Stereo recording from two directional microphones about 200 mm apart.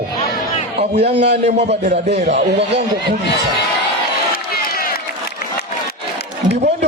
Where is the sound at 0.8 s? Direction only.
35° right (ahead or behind).